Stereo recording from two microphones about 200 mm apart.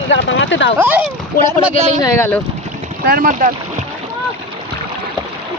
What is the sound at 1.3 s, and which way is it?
Speech, 45° left (ahead or behind).